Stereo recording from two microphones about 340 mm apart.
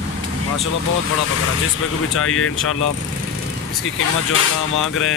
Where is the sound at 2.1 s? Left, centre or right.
Left.